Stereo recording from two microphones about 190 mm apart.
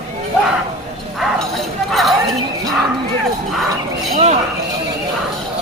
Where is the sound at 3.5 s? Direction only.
Centre (ahead or behind).